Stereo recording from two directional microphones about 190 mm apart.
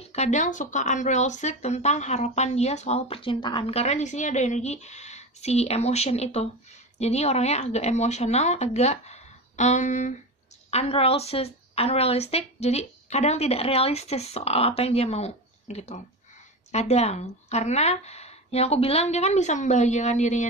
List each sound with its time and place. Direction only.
0.0 s speech: 35° left (ahead or behind)